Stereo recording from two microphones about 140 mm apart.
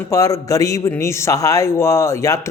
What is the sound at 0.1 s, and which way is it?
Speech, 25° left (ahead or behind).